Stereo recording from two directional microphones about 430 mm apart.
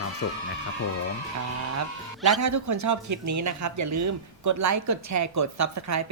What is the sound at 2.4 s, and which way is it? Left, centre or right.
Speech, right.